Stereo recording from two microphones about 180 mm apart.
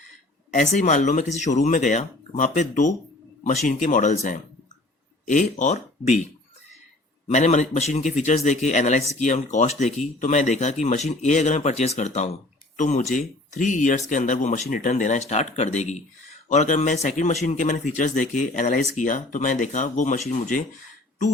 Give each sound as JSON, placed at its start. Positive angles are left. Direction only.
{"t": 0.5, "sound": "a man's voice", "side_deg": 40}
{"t": 7.3, "sound": "a man's voice", "side_deg": 40}